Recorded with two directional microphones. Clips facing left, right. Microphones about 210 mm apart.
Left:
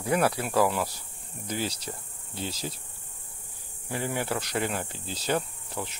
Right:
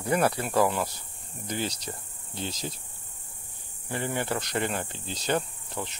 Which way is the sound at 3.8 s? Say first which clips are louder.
Even; 5° left (ahead or behind).